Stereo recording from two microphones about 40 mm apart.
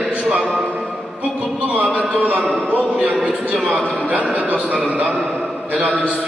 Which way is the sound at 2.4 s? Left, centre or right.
Left.